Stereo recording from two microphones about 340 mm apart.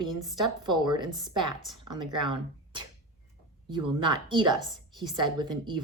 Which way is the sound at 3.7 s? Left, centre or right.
Centre.